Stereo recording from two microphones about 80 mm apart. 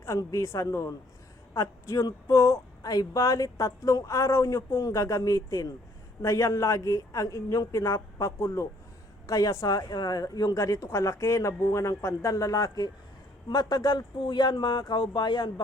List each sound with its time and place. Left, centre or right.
0.0 s a man's voice: left